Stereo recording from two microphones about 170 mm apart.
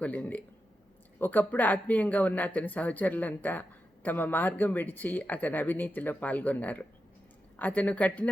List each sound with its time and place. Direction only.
0.0 s speech: 10° left (ahead or behind)